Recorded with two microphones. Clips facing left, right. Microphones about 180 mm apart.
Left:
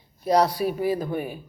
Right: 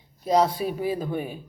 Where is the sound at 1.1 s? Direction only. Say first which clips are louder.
Left 1 dB; 5° left (ahead or behind).